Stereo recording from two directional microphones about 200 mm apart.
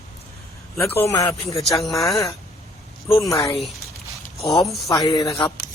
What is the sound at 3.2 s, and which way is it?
Speech, 15° left (ahead or behind).